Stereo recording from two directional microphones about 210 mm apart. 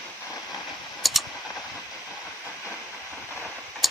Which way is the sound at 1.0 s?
Centre (ahead or behind).